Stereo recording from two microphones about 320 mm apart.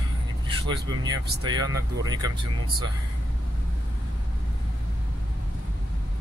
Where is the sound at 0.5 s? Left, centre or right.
Centre.